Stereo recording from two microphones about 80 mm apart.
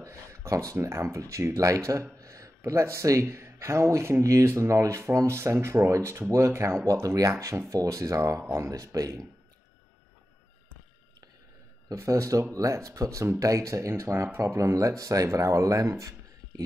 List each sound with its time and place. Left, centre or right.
0.0 s a sound: right
0.7 s speech: right
11.9 s speech: right